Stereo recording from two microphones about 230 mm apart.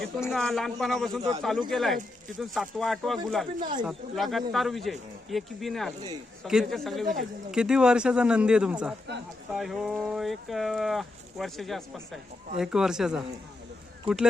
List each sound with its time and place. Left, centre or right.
0.2 s speech: centre
3.6 s speech: centre
3.8 s speech: centre
14.1 s speech: right